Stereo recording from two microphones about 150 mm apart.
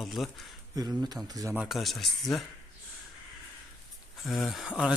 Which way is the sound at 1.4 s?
Centre (ahead or behind).